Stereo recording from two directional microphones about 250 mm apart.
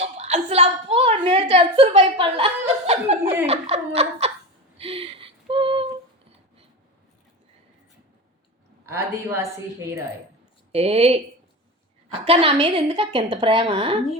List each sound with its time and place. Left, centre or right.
0.0 s a woman's voice: right
4.8 s a sound: right
8.9 s speech: centre
10.7 s a woman's voice: right
12.2 s a woman's voice: right